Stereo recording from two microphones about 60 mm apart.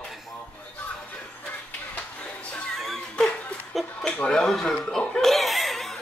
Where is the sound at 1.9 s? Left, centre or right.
Left.